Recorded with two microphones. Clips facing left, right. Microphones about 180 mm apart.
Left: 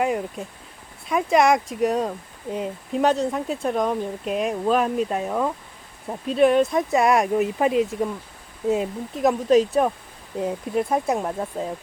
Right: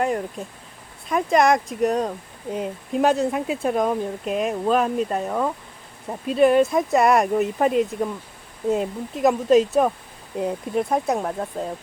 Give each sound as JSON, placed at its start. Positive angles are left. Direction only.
{"t": 0.0, "sound": "speech", "side_deg": 5}